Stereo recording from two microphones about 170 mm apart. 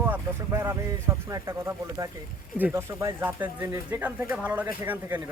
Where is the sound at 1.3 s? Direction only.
20° right (ahead or behind).